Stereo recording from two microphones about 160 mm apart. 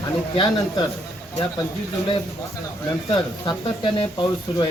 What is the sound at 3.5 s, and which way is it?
Speech, 30° left (ahead or behind).